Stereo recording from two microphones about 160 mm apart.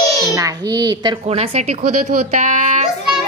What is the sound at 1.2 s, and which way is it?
A woman's voice, 40° right (ahead or behind).